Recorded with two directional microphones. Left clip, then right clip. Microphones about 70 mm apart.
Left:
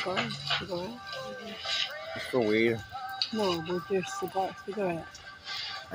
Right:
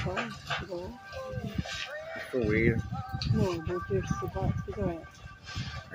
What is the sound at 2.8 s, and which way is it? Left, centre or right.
Speech, left.